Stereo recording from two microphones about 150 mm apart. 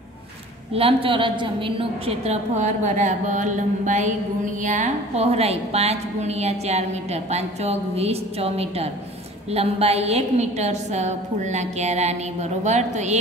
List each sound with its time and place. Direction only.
0.7 s a woman's voice: 40° right (ahead or behind)